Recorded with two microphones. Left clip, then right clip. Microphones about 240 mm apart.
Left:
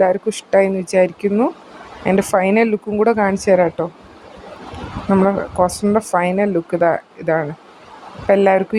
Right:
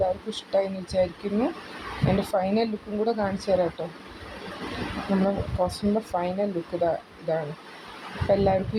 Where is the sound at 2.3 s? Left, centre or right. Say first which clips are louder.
Left 12 dB; left.